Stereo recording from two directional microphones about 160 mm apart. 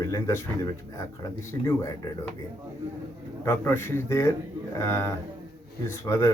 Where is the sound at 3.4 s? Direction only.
15° left (ahead or behind).